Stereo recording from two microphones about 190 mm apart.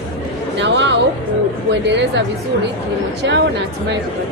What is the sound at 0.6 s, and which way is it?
Speech, 70° right (ahead or behind).